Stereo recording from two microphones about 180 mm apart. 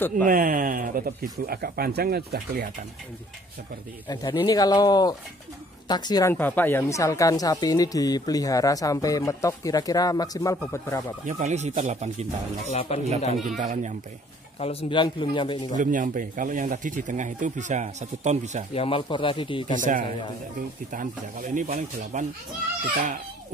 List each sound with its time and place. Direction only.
0.1 s speech: 50° right (ahead or behind)
4.1 s speech: 25° left (ahead or behind)
6.3 s speech: 10° left (ahead or behind)
11.2 s speech: 40° right (ahead or behind)
12.6 s a man's voice: 40° left (ahead or behind)
13.6 s speech: 40° right (ahead or behind)
14.6 s speech: 35° left (ahead or behind)
15.8 s speech: 45° right (ahead or behind)
18.7 s speech: 30° left (ahead or behind)
19.8 s speech: 45° right (ahead or behind)